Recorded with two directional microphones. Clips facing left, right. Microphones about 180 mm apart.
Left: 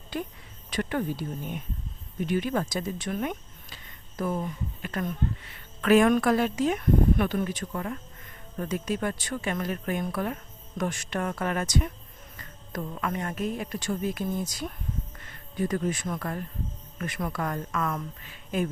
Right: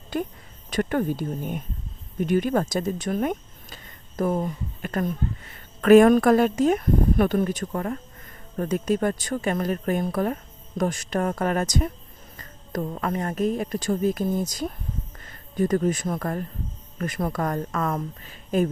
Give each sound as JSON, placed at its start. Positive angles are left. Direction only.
{"t": 0.1, "sound": "speech", "side_deg": -45}